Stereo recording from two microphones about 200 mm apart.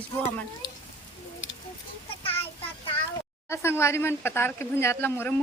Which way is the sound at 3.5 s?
15° left (ahead or behind).